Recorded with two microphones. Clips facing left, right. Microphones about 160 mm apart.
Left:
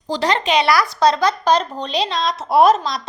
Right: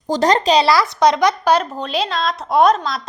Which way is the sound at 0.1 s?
45° right (ahead or behind).